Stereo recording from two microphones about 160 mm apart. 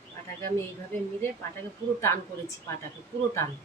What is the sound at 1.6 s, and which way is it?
Speech, 15° left (ahead or behind).